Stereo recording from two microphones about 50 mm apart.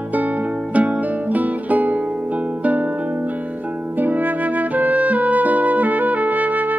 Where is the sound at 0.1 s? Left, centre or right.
Right.